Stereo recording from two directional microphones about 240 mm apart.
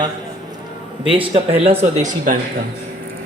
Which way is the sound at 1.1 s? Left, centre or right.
Right.